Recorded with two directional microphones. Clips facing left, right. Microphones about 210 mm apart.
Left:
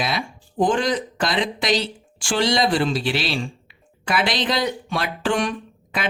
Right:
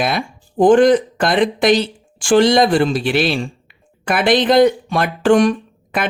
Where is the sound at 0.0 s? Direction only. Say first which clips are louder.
Right 6 dB; 55° right (ahead or behind).